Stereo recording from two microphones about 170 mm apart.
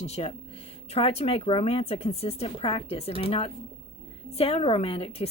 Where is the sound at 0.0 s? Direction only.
35° left (ahead or behind).